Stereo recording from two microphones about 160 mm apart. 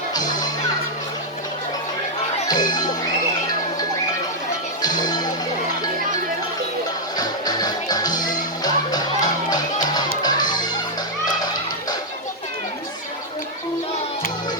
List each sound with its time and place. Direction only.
0.1 s music: 25° left (ahead or behind)
2.5 s speech: 25° left (ahead or behind)
4.8 s music: 25° left (ahead or behind)
7.2 s music: 25° left (ahead or behind)
10.2 s fowl: 25° left (ahead or behind)